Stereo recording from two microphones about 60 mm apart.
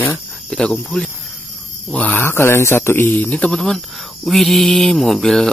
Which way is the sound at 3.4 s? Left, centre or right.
Centre.